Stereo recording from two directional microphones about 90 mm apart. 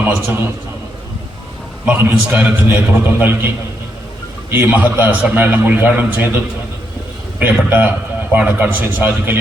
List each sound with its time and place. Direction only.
1.8 s a man's voice: 20° right (ahead or behind)
4.5 s a man's voice: 20° right (ahead or behind)
7.3 s a man's voice: 20° right (ahead or behind)